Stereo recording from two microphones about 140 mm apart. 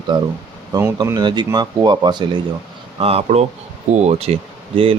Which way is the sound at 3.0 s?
45° right (ahead or behind).